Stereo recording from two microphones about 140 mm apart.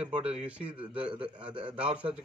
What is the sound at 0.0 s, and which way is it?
Speech, 45° right (ahead or behind).